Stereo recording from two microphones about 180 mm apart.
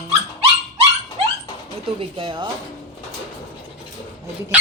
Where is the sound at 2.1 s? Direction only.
25° right (ahead or behind).